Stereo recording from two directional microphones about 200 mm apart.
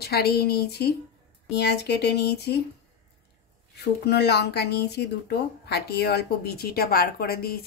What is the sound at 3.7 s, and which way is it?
A woman's voice, 55° left (ahead or behind).